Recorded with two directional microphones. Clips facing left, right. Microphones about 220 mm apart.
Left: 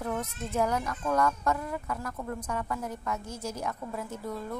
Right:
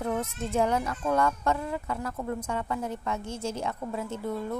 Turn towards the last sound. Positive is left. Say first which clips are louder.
# right 4 dB
turn(degrees=-25)  # may be behind; listen again after turning